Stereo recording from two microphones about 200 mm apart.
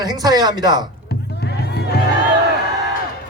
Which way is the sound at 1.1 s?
55° left (ahead or behind).